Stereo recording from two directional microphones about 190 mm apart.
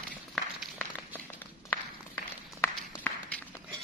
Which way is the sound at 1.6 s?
10° left (ahead or behind).